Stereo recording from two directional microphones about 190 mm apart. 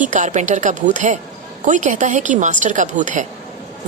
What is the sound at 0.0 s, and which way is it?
A woman's voice, 40° right (ahead or behind).